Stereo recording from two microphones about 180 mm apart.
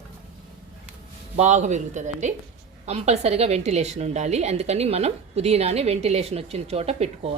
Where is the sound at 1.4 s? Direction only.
40° right (ahead or behind).